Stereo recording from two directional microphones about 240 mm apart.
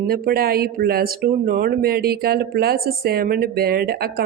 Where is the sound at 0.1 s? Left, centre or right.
Right.